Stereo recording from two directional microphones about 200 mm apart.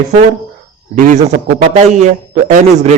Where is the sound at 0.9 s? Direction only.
35° right (ahead or behind).